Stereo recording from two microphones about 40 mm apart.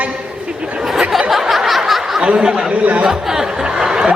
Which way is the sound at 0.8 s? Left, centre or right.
Centre.